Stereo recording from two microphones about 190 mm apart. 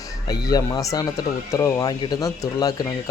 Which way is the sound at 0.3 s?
20° left (ahead or behind).